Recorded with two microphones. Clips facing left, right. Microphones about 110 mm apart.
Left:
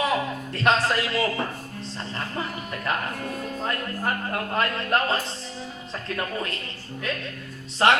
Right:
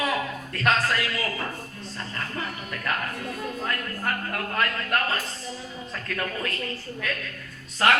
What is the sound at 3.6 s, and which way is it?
Speech, 25° left (ahead or behind).